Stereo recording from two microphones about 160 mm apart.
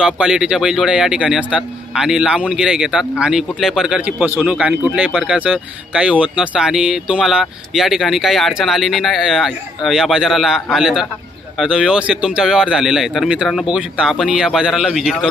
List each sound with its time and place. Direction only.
0.0 s speech: 5° right (ahead or behind)